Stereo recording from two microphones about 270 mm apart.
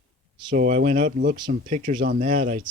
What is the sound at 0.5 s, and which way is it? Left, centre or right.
Speech, right.